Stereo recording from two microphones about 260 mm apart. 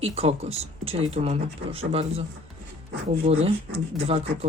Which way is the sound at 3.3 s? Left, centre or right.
Right.